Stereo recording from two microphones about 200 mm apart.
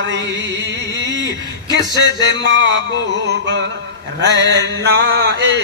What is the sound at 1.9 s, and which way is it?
A man's voice, 60° right (ahead or behind).